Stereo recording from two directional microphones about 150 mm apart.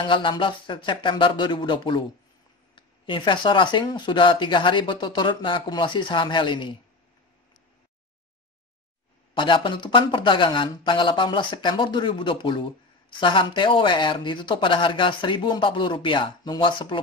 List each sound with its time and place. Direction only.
0.1 s speech: 35° left (ahead or behind)
9.3 s speech: 35° left (ahead or behind)